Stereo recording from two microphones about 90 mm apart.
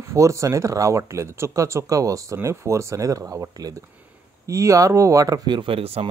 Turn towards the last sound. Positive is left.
turn(degrees=-90)